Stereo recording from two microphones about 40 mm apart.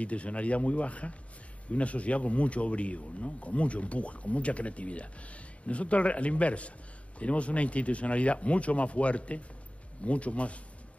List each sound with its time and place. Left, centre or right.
0.0 s speech: left